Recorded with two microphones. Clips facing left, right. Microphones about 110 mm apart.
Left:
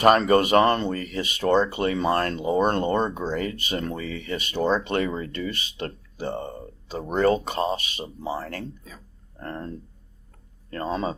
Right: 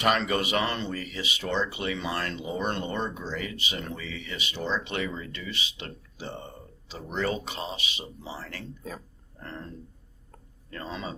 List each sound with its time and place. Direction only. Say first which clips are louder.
0.0 s speech: left 8 dB; 45° left (ahead or behind)